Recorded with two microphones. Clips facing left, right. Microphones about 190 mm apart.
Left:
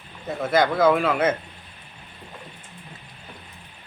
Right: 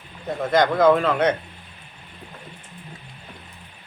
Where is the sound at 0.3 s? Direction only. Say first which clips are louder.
Right 1 dB; 5° left (ahead or behind).